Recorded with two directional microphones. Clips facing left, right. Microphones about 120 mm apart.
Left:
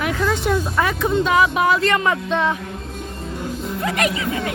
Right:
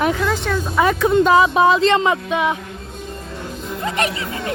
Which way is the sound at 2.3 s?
10° right (ahead or behind).